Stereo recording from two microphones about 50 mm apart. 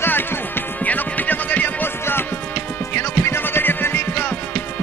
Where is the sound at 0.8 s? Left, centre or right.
Left.